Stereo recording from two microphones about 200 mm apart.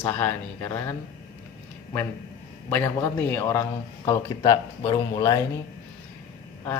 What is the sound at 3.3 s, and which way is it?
Speech, 15° left (ahead or behind).